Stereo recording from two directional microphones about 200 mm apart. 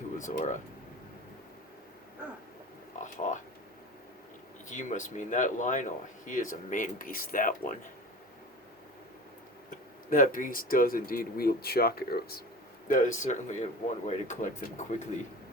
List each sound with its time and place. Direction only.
0.2 s speech: 40° left (ahead or behind)
3.0 s speech: 40° left (ahead or behind)
4.7 s speech: 40° left (ahead or behind)
9.6 s speech: 40° left (ahead or behind)
12.9 s speech: 40° left (ahead or behind)